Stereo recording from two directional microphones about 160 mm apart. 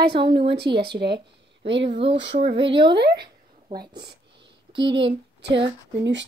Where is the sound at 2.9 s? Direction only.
90° right.